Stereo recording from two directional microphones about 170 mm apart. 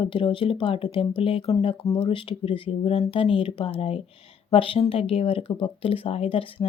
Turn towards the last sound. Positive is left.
turn(degrees=35)  # may be behind; listen again after turning